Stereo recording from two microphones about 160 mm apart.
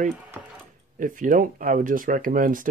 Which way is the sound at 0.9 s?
55° right (ahead or behind).